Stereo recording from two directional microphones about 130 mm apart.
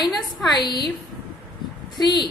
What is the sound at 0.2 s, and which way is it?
Speech, 35° left (ahead or behind).